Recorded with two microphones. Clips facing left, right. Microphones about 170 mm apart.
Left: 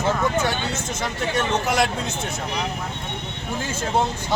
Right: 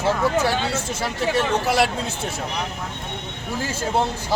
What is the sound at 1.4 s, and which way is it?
Speech, 30° right (ahead or behind).